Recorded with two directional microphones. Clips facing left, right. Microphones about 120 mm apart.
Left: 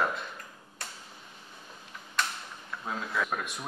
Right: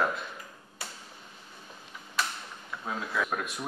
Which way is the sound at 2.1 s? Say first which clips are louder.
Even; centre (ahead or behind).